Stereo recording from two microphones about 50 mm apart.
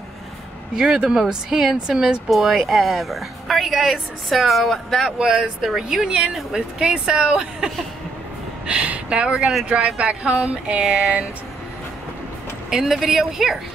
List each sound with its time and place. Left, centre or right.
0.7 s speech: centre
1.9 s speech: centre
2.2 s speech: centre
5.2 s speech: centre
10.8 s speech: centre
12.6 s speech: centre